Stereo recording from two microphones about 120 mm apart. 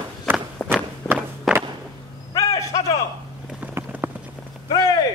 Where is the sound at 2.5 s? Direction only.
30° left (ahead or behind).